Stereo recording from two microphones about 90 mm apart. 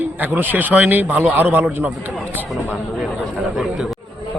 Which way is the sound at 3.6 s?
5° right (ahead or behind).